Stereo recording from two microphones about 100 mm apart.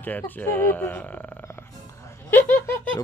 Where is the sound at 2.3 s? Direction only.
20° left (ahead or behind).